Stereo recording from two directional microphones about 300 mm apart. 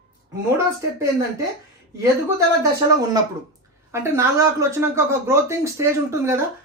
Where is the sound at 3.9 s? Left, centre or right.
Centre.